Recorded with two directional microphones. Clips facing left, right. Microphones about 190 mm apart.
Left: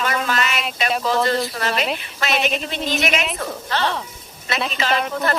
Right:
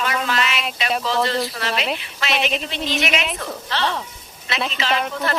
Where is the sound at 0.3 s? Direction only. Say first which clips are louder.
Even; 45° left (ahead or behind).